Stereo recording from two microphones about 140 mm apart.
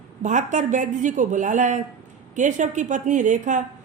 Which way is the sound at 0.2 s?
60° right (ahead or behind).